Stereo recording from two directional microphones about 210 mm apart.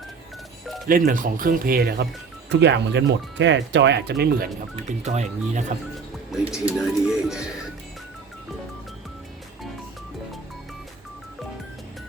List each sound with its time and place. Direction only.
0.9 s speech: 40° right (ahead or behind)
4.9 s speech: 35° right (ahead or behind)
6.5 s speech: 5° right (ahead or behind)